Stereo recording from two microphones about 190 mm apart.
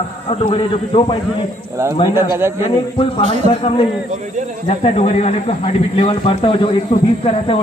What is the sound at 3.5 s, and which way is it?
Speech, 30° left (ahead or behind).